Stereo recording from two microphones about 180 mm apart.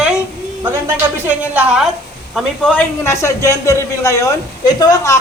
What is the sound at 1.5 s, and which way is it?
Speech, 5° right (ahead or behind).